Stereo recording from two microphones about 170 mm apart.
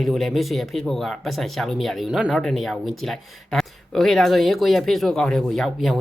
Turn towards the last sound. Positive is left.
turn(degrees=0)  # may be behind; listen again after turning